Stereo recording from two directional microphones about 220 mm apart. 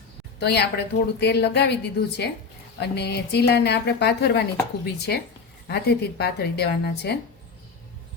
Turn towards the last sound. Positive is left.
turn(degrees=50)  # may be behind; listen again after turning